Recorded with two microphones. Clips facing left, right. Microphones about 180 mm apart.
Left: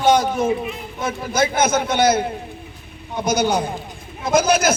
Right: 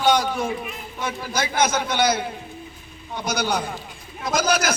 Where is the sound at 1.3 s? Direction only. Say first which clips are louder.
Left 4 dB; 50° left (ahead or behind).